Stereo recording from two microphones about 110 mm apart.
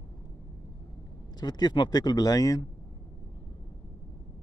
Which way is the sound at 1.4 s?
40° left (ahead or behind).